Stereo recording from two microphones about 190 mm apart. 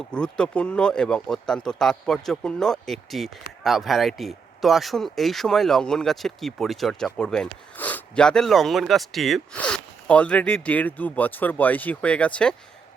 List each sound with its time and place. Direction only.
0.0 s speech: 5° left (ahead or behind)